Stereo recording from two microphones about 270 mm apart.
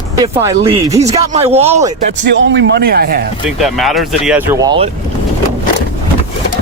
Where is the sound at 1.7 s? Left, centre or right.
Centre.